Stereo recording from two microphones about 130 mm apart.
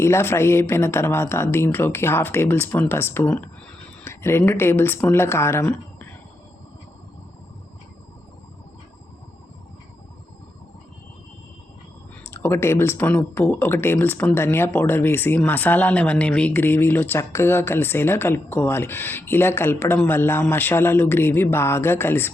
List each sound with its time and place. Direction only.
0.0 s speech: 20° left (ahead or behind)
12.2 s speech: 15° left (ahead or behind)